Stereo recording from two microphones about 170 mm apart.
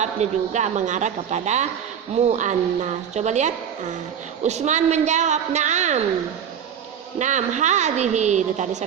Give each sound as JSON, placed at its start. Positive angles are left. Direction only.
{"t": 0.0, "sound": "a woman's voice", "side_deg": -45}
{"t": 7.2, "sound": "a woman's voice", "side_deg": -45}